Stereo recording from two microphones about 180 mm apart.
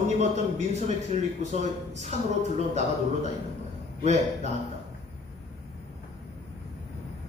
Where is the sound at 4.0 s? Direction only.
40° right (ahead or behind).